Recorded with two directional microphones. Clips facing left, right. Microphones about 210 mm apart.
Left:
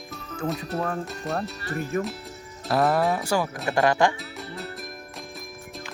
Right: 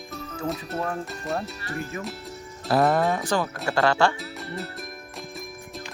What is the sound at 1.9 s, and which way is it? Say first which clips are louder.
Speech: left 10 dB; 55° left (ahead or behind).